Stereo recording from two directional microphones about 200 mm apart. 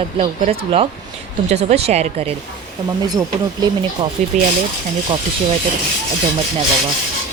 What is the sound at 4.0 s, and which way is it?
Speech, 20° right (ahead or behind).